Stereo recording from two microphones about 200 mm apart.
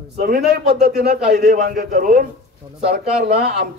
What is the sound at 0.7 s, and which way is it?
Speech, 55° right (ahead or behind).